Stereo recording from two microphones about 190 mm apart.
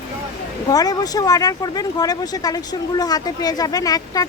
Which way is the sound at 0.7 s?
20° left (ahead or behind).